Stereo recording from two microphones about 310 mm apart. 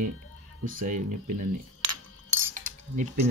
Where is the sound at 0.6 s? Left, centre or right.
Right.